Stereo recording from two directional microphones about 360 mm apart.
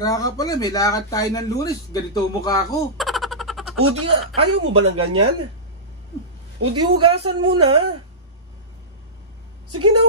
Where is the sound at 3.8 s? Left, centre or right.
Right.